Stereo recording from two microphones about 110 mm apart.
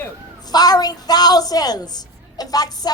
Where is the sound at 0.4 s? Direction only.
35° left (ahead or behind).